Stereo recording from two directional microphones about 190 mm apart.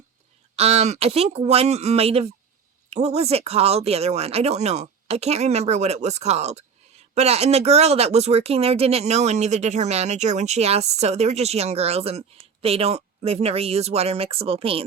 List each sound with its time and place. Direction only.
0.5 s speech: 35° right (ahead or behind)